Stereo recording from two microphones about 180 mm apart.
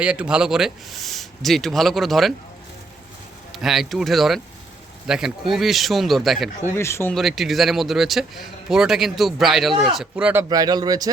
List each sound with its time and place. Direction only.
0.0 s speech: 5° right (ahead or behind)
3.5 s speech: centre (ahead or behind)
6.7 s speech: 15° left (ahead or behind)
7.1 s speech: centre (ahead or behind)
10.5 s a man's voice: 20° right (ahead or behind)